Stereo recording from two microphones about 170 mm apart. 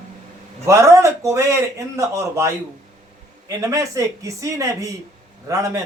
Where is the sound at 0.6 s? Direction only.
15° right (ahead or behind).